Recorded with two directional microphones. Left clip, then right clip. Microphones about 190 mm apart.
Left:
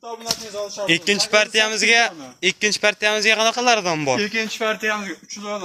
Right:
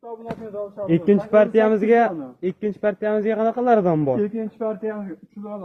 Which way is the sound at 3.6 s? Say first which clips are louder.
Even; 10° left (ahead or behind).